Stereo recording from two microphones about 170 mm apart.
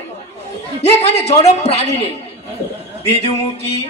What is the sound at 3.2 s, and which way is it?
Speech, 40° left (ahead or behind).